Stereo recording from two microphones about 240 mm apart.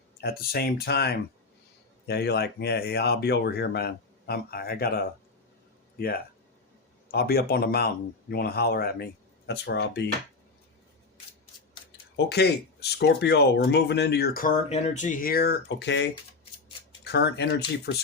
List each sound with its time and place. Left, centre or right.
0.2 s speech: left
7.1 s speech: left
12.1 s speech: left